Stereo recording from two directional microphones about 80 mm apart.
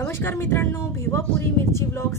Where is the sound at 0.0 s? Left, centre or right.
Left.